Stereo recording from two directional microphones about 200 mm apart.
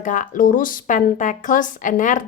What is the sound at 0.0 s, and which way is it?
A woman's voice, 40° left (ahead or behind).